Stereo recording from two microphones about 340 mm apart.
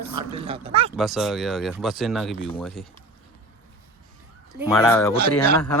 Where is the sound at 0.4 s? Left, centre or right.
Centre.